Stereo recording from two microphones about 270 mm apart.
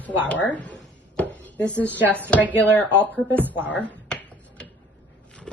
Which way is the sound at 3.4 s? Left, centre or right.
Centre.